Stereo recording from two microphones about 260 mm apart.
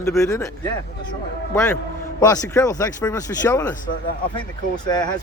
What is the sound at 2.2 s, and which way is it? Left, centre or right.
Speech, centre.